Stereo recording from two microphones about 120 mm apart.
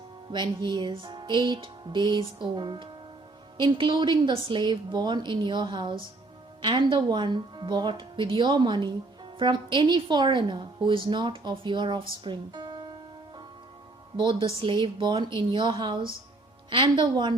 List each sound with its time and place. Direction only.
0.3 s a woman's voice: 40° right (ahead or behind)
14.2 s a woman's voice: 40° right (ahead or behind)